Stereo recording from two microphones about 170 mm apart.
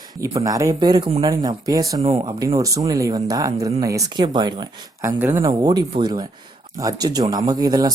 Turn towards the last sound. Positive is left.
turn(degrees=-20)  # may be behind; listen again after turning